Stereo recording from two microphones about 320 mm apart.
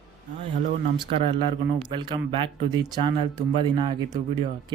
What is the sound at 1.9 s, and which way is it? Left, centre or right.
Speech, centre.